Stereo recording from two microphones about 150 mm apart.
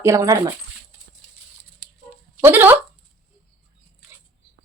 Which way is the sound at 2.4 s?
15° right (ahead or behind).